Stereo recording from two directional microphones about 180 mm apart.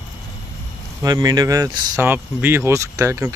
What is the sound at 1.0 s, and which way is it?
Speech, 20° right (ahead or behind).